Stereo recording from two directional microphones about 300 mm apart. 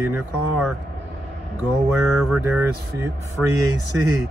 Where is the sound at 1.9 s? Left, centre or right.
Centre.